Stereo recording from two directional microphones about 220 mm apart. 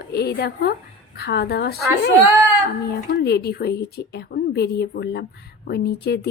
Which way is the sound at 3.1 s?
50° left (ahead or behind).